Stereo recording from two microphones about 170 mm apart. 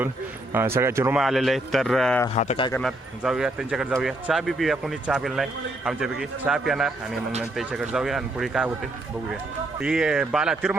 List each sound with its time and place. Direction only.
0.5 s speech: 15° right (ahead or behind)
1.2 s a man's voice: centre (ahead or behind)
2.3 s speech: 40° left (ahead or behind)
2.7 s a man's voice: centre (ahead or behind)
9.8 s a man's voice: 5° right (ahead or behind)